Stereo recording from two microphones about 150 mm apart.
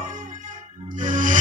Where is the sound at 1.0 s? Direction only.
60° right (ahead or behind).